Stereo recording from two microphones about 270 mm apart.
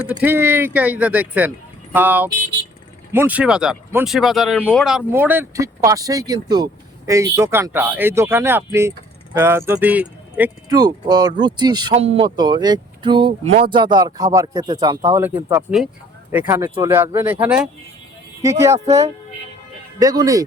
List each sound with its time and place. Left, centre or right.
0.2 s speech: centre